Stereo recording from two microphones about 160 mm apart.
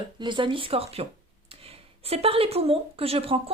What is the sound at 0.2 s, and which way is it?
Speech, 30° right (ahead or behind).